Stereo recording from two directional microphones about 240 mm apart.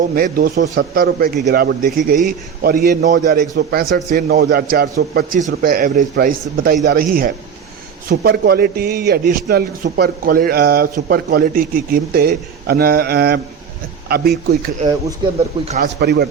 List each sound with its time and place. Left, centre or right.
0.2 s a man's voice: right
15.6 s a man's voice: right
16.0 s a man's voice: right